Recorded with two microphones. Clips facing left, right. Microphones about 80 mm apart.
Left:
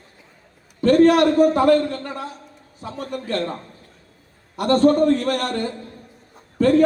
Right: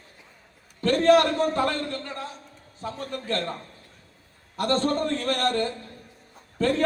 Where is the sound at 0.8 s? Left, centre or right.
Centre.